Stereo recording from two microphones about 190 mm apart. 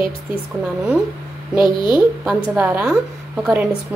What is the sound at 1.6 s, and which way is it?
Speech, 25° left (ahead or behind).